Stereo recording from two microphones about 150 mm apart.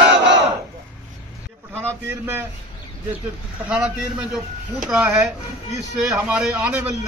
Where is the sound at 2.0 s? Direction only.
15° right (ahead or behind).